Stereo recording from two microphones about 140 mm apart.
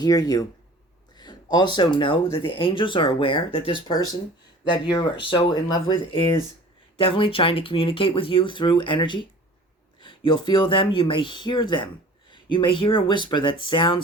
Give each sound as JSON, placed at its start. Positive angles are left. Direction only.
{"t": 0.0, "sound": "speech", "side_deg": 25}